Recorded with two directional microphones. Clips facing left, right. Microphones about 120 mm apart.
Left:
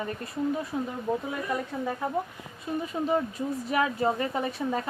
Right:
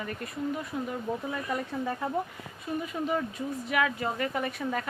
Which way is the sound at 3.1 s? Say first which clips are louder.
Left 5 dB; 35° left (ahead or behind).